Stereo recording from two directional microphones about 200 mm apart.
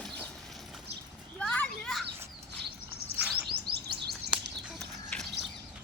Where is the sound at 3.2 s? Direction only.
10° right (ahead or behind).